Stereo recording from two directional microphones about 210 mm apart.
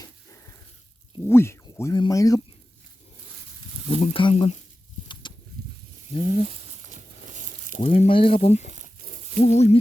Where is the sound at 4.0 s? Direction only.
25° left (ahead or behind).